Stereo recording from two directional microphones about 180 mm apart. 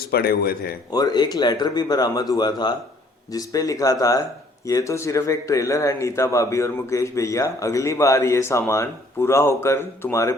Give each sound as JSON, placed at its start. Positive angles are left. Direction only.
{"t": 0.1, "sound": "speech", "side_deg": 60}
{"t": 0.9, "sound": "speech", "side_deg": 20}